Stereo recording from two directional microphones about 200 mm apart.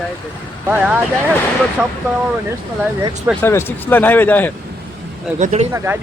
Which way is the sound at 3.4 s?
10° left (ahead or behind).